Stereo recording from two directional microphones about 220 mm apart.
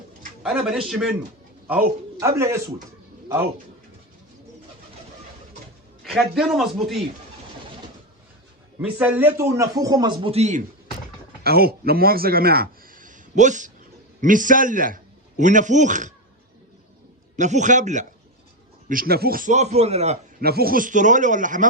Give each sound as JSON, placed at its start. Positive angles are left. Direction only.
{"t": 0.4, "sound": "a man's voice", "side_deg": -5}
{"t": 2.1, "sound": "a man's voice", "side_deg": -15}
{"t": 6.0, "sound": "a man's voice", "side_deg": 0}
{"t": 8.8, "sound": "a man's voice", "side_deg": -5}
{"t": 11.4, "sound": "a man's voice", "side_deg": -45}
{"t": 17.3, "sound": "a man's voice", "side_deg": -35}
{"t": 20.4, "sound": "a man's voice", "side_deg": -45}